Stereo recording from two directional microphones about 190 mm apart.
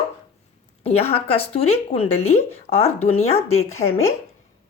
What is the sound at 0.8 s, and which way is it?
A woman's voice, 30° left (ahead or behind).